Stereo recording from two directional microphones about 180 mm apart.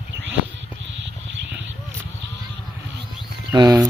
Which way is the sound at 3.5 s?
20° right (ahead or behind).